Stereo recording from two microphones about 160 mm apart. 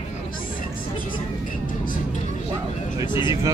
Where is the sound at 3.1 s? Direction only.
30° left (ahead or behind).